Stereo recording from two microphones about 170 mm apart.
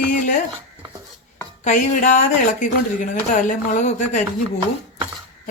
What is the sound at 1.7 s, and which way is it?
Speech, 45° left (ahead or behind).